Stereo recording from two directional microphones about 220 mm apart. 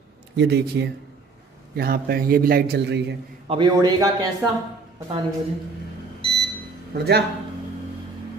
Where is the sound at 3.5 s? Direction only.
20° right (ahead or behind).